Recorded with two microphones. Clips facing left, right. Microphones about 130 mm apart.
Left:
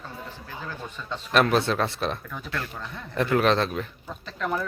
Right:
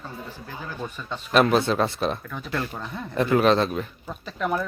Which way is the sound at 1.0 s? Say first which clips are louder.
Right 2 dB; 5° right (ahead or behind).